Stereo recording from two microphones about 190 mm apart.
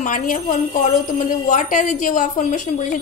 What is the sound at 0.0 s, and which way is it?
A woman's voice, 45° left (ahead or behind).